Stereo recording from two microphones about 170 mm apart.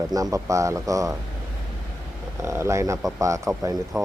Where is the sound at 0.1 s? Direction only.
20° right (ahead or behind).